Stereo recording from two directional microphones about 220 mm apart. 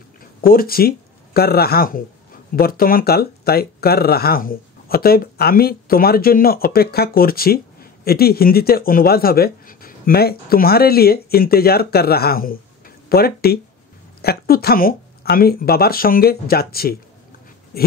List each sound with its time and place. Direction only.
0.4 s speech: 40° left (ahead or behind)